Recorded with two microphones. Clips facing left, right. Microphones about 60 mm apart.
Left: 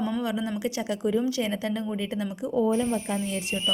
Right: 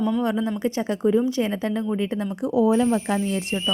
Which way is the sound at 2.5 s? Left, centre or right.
Right.